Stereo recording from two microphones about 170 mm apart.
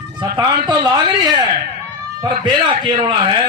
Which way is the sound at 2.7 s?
30° right (ahead or behind).